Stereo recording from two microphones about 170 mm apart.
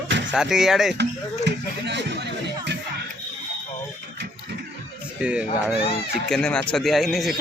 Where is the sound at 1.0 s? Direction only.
90° right.